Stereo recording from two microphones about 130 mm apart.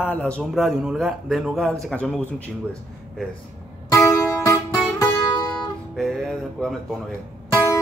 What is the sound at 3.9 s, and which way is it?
Music, 25° left (ahead or behind).